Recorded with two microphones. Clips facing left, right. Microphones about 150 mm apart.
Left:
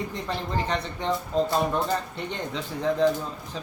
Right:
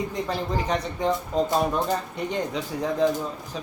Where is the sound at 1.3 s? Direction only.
10° right (ahead or behind).